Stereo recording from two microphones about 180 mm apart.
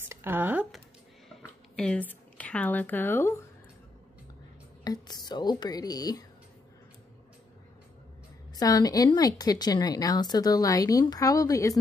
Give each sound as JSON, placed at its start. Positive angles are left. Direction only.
{"t": 0.1, "sound": "speech", "side_deg": -10}
{"t": 4.8, "sound": "a woman's voice", "side_deg": 20}
{"t": 8.5, "sound": "a woman's voice", "side_deg": 20}